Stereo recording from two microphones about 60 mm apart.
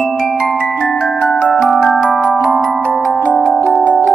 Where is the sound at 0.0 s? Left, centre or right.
Centre.